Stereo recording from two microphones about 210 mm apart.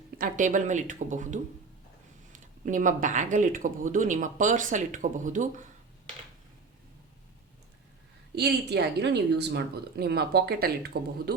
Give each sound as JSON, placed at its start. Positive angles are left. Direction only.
{"t": 0.2, "sound": "speech", "side_deg": -35}
{"t": 8.4, "sound": "speech", "side_deg": -50}